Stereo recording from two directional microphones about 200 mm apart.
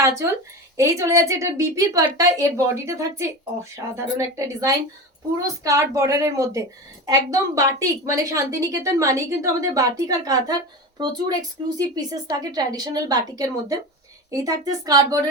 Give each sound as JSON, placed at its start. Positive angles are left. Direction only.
{"t": 0.0, "sound": "a woman's voice", "side_deg": -15}